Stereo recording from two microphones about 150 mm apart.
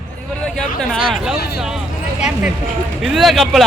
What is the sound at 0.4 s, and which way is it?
Speech, 5° left (ahead or behind).